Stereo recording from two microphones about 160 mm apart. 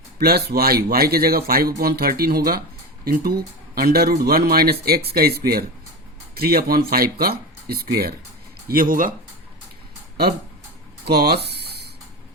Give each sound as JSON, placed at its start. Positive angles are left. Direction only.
{"t": 0.2, "sound": "speech", "side_deg": -80}
{"t": 8.6, "sound": "speech", "side_deg": -65}
{"t": 11.0, "sound": "speech", "side_deg": -80}
{"t": 11.4, "sound": "a sound", "side_deg": -90}